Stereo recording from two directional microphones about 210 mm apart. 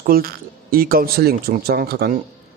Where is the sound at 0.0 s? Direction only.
45° right (ahead or behind).